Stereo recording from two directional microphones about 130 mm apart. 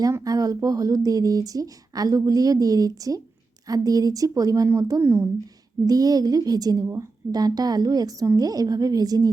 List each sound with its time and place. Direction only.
0.0 s a woman's voice: 30° right (ahead or behind)